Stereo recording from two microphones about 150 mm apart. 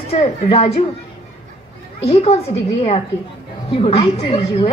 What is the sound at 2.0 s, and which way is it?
A woman's voice, 45° left (ahead or behind).